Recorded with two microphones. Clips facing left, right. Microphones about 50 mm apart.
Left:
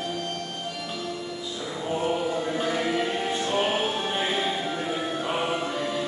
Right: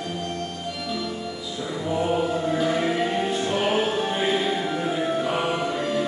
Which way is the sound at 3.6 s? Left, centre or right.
Right.